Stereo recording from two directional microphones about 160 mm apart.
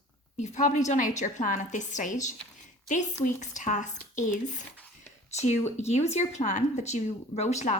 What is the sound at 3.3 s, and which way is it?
Speech, 50° left (ahead or behind).